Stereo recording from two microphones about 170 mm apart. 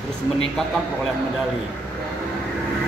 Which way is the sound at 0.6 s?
5° left (ahead or behind).